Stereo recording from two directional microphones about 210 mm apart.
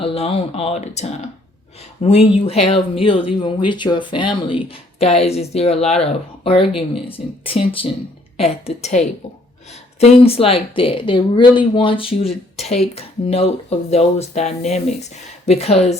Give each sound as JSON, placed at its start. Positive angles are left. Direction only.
{"t": 0.0, "sound": "speech", "side_deg": 25}